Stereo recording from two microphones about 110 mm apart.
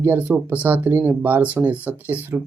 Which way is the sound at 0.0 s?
15° right (ahead or behind).